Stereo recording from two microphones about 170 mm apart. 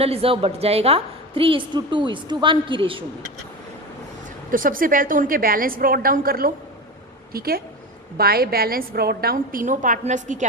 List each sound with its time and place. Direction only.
0.0 s a woman's voice: 35° right (ahead or behind)
4.5 s a woman's voice: 55° right (ahead or behind)